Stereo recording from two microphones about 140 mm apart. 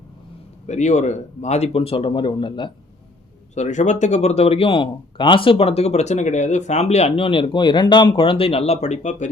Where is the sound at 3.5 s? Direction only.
60° left (ahead or behind).